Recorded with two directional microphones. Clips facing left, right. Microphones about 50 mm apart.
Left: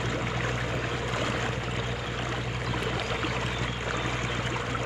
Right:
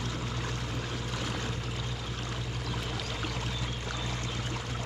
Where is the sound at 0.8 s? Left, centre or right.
Left.